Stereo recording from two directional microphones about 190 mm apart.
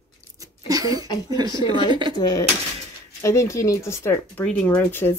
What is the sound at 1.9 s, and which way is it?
Speech, 25° right (ahead or behind).